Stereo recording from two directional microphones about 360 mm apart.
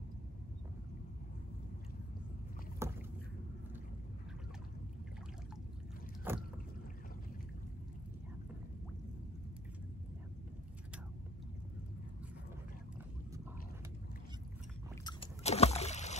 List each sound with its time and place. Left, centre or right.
2.8 s rowboat: centre
6.3 s boat: centre
15.0 s boat: centre